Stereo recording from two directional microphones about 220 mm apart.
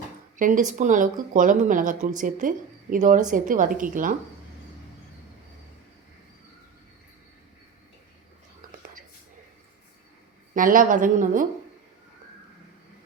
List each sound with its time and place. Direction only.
0.3 s speech: 35° right (ahead or behind)
10.5 s speech: 40° right (ahead or behind)